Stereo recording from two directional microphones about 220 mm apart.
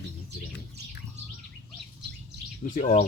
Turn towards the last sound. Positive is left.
turn(degrees=35)  # may be behind; listen again after turning